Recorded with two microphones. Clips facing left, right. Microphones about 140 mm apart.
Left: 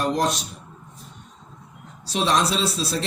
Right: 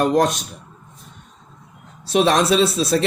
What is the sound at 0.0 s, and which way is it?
Speech, 50° right (ahead or behind).